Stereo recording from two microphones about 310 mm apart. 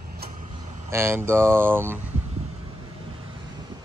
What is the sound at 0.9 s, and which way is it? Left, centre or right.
Speech, centre.